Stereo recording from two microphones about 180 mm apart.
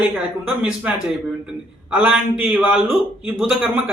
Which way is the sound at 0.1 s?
5° right (ahead or behind).